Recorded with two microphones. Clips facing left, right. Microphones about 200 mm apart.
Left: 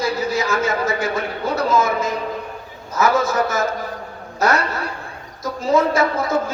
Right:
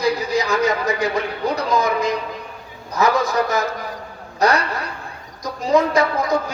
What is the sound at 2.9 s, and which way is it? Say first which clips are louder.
Speech: even; 15° right (ahead or behind).